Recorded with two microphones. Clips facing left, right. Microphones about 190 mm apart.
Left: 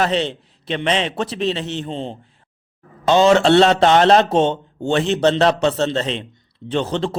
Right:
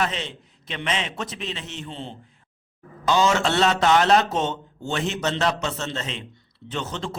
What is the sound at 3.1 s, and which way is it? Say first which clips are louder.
A man's voice: left 8 dB; 30° left (ahead or behind).